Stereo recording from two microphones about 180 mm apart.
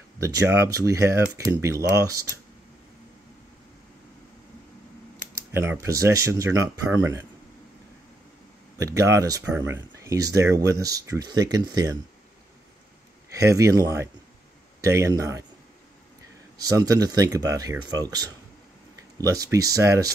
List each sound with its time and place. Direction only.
0.2 s speech: 15° right (ahead or behind)
5.5 s speech: 15° right (ahead or behind)
8.7 s speech: 20° right (ahead or behind)
13.3 s speech: 20° right (ahead or behind)
16.5 s speech: 20° right (ahead or behind)